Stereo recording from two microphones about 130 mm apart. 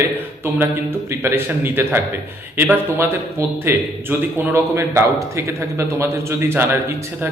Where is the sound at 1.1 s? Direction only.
20° right (ahead or behind).